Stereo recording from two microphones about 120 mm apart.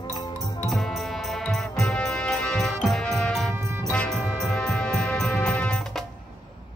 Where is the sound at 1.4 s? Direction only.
5° left (ahead or behind).